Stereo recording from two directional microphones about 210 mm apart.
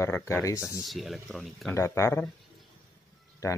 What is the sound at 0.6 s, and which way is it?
Speech, 5° right (ahead or behind).